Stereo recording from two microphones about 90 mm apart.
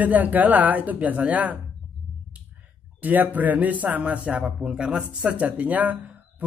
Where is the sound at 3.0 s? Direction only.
20° right (ahead or behind).